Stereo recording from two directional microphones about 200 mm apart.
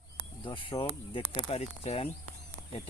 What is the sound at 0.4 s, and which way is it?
Speech, 25° left (ahead or behind).